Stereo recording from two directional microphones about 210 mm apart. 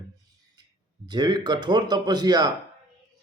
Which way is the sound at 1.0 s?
20° right (ahead or behind).